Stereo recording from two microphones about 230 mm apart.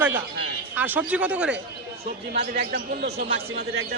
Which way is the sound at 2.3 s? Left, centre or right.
Right.